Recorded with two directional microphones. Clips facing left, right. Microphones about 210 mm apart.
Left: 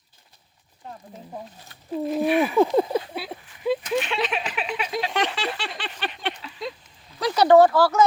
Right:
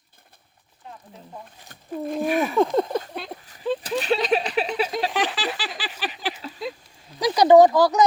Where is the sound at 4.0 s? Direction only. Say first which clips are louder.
Right 4 dB; 40° right (ahead or behind).